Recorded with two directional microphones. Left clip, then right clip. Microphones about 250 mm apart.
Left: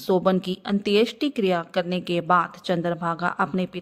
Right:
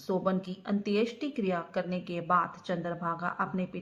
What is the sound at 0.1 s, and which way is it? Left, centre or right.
A woman's voice, left.